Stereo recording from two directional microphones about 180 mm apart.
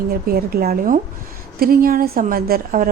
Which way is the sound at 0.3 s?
55° right (ahead or behind).